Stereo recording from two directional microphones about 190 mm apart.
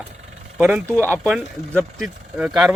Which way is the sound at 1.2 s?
5° left (ahead or behind).